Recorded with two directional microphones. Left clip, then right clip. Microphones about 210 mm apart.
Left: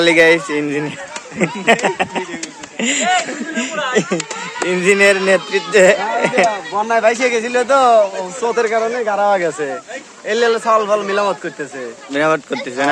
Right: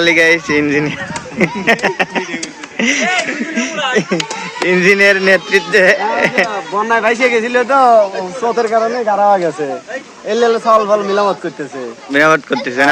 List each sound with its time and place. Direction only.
0.0 s speech: 5° left (ahead or behind)
4.7 s speech: centre (ahead or behind)
6.8 s a man's voice: 60° left (ahead or behind)
7.9 s speech: 20° left (ahead or behind)
10.2 s speech: 10° left (ahead or behind)